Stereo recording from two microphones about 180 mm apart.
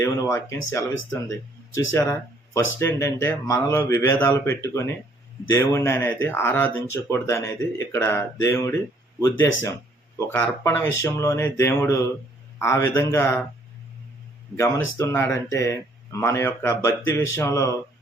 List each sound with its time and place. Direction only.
0.0 s speech: 15° left (ahead or behind)
10.2 s speech: 10° left (ahead or behind)
14.5 s speech: 15° left (ahead or behind)